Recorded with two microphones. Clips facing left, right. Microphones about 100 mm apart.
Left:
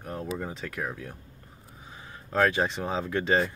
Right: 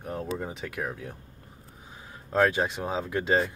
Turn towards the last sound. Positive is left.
turn(degrees=-10)  # may be behind; listen again after turning